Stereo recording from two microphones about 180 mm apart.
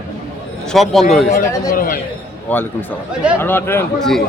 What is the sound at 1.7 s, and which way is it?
Speech, 55° left (ahead or behind).